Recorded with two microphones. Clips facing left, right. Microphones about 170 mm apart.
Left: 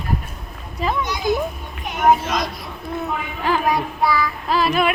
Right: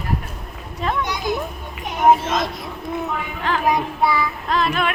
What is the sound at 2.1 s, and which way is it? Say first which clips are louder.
Speech: right 1 dB; 25° right (ahead or behind).